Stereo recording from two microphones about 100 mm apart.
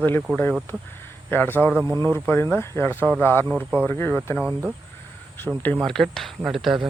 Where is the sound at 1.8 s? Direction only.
45° right (ahead or behind).